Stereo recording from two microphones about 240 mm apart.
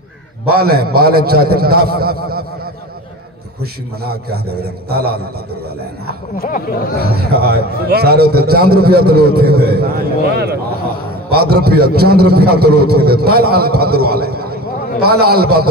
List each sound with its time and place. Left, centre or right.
0.6 s a man's voice: right
4.0 s a man's voice: right
6.3 s speech: left
7.0 s a man's voice: right